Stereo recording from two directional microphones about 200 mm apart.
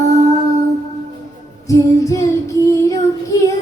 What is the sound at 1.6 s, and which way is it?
Child singing, 15° left (ahead or behind).